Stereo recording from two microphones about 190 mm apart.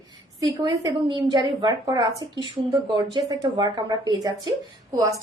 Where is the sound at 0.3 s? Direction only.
20° right (ahead or behind).